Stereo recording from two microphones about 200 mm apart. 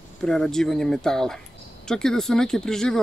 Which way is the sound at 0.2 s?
Centre (ahead or behind).